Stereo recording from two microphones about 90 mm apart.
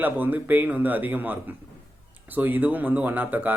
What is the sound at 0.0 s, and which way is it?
Speech, 20° right (ahead or behind).